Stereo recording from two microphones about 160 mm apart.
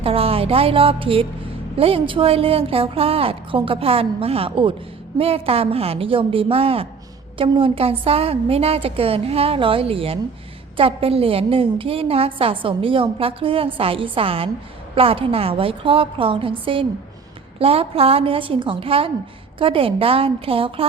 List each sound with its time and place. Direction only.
0.0 s a woman's voice: 35° right (ahead or behind)